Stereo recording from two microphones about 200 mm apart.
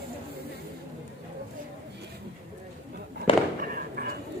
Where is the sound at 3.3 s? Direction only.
25° left (ahead or behind).